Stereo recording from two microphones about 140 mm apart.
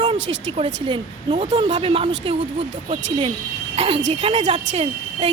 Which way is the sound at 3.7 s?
45° right (ahead or behind).